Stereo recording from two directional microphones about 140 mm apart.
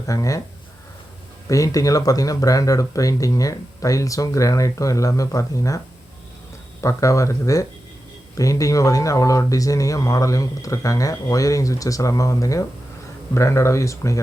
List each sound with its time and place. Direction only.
0.1 s speech: 25° left (ahead or behind)
1.5 s speech: 25° left (ahead or behind)
6.8 s speech: 25° left (ahead or behind)